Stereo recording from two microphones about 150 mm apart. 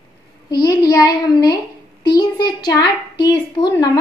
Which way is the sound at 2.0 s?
30° left (ahead or behind).